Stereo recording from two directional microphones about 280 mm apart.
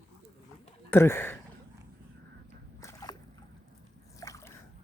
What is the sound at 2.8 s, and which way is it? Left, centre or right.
Boat, centre.